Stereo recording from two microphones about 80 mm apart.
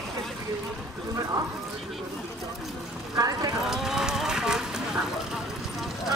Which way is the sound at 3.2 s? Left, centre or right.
Right.